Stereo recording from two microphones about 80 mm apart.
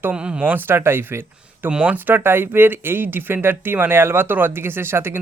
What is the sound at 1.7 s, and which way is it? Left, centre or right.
Speech, centre.